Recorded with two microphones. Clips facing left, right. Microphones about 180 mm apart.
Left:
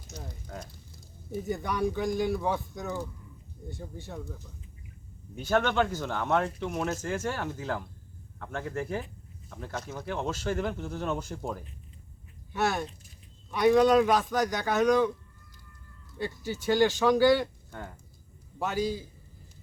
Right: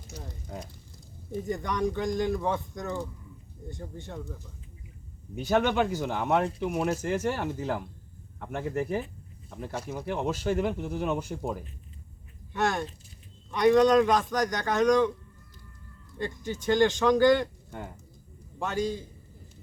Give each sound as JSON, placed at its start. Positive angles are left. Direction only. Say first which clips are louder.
{"t": 0.1, "sound": "speech", "louder": "right 1 dB", "side_deg": -15}
{"t": 1.3, "sound": "speech", "louder": "right 1 dB", "side_deg": 5}
{"t": 5.4, "sound": "speech", "louder": "right 1 dB", "side_deg": -15}
{"t": 12.5, "sound": "speech", "louder": "right 1 dB", "side_deg": 5}
{"t": 16.1, "sound": "speech", "louder": "right 1 dB", "side_deg": 5}
{"t": 17.7, "sound": "speech", "louder": "right 2 dB", "side_deg": -10}
{"t": 18.6, "sound": "speech", "louder": "even", "side_deg": 5}